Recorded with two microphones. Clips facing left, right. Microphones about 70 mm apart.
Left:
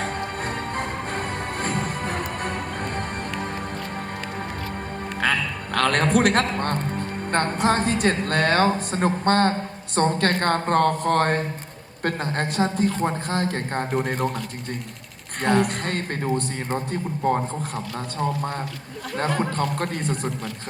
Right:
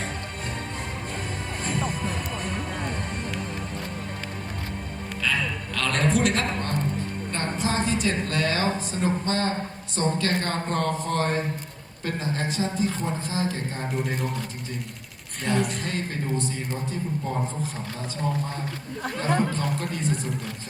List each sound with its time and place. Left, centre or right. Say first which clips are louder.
0.0 s music: left 6 dB; left
5.2 s a man's voice: left 3 dB; left
15.4 s a man's voice: left 5 dB; left
19.5 s a man's voice: left 3 dB; left